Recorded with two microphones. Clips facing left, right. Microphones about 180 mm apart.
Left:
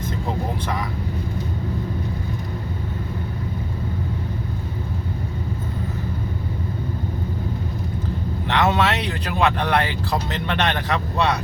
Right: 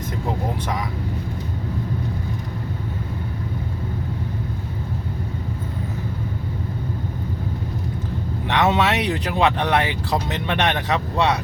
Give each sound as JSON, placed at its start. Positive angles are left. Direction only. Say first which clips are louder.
{"t": 8.4, "sound": "speech", "louder": "right 1 dB", "side_deg": -15}